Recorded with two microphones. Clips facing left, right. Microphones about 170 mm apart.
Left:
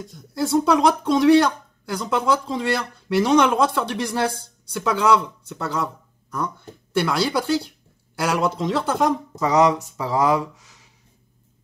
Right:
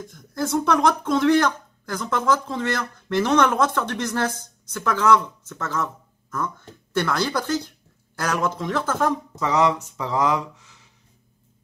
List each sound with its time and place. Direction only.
0.7 s speech: 15° left (ahead or behind)